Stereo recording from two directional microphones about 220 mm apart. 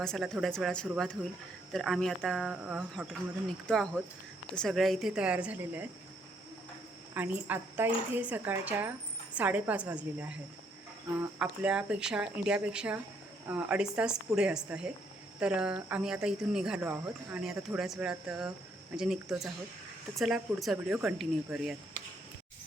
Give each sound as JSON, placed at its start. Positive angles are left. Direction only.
{"t": 0.0, "sound": "speech", "side_deg": 0}
{"t": 7.1, "sound": "a woman's voice", "side_deg": -10}